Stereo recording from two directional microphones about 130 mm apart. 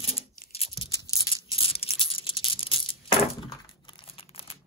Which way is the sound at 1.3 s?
45° left (ahead or behind).